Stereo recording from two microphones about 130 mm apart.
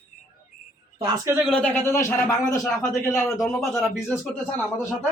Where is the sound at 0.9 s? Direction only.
25° right (ahead or behind).